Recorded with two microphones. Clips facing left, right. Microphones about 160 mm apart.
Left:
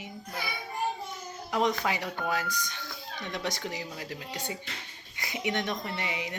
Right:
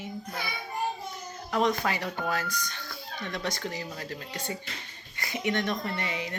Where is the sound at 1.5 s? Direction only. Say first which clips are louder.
Right 1 dB; 15° left (ahead or behind).